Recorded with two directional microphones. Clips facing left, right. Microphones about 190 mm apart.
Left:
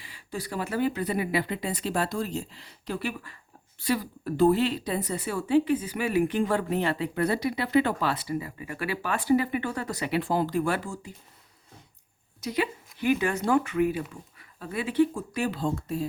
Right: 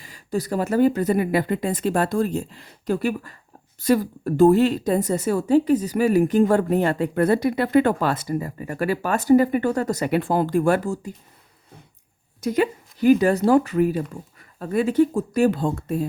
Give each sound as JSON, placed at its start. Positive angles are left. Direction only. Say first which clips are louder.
{"t": 0.0, "sound": "speech", "louder": "right 10 dB", "side_deg": -40}
{"t": 12.4, "sound": "speech", "louder": "right 8 dB", "side_deg": -45}